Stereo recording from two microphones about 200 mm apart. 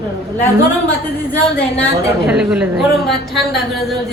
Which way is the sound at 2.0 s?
5° right (ahead or behind).